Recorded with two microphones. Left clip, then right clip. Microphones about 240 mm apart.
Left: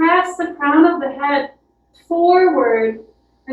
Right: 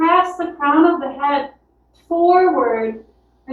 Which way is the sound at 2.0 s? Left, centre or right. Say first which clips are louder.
Left 1 dB; left.